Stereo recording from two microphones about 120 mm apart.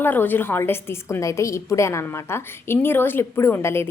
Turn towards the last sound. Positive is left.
turn(degrees=20)  # may be behind; listen again after turning